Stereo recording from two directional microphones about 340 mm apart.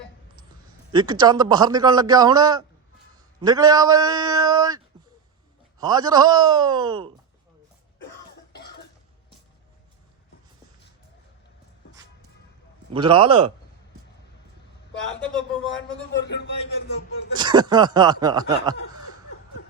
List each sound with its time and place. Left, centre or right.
0.9 s a man's voice: centre
5.8 s a man's voice: centre
12.9 s a man's voice: centre
16.2 s speech: left
17.3 s a man's voice: centre